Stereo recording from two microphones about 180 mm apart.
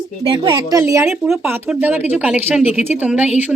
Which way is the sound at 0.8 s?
15° right (ahead or behind).